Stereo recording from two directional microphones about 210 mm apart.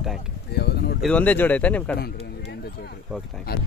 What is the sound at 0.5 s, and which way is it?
Speech, 50° left (ahead or behind).